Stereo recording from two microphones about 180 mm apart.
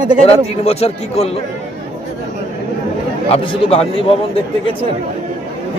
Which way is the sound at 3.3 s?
30° left (ahead or behind).